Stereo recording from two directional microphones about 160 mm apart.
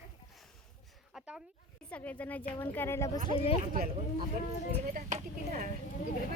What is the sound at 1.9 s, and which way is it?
A woman's voice, 10° left (ahead or behind).